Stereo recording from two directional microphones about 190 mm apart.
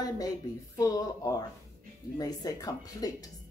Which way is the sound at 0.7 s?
20° left (ahead or behind).